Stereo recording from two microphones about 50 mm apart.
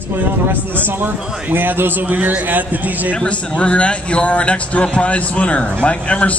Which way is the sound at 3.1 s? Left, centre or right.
Left.